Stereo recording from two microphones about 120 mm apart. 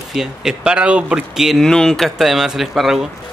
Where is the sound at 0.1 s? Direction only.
5° right (ahead or behind).